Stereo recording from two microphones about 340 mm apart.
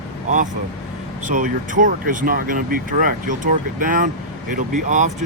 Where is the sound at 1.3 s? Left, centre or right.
Right.